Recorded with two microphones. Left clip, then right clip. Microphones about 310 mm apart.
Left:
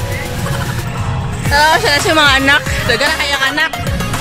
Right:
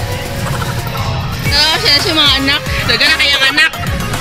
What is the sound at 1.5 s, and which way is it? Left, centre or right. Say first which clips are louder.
Speech: left 1 dB; left.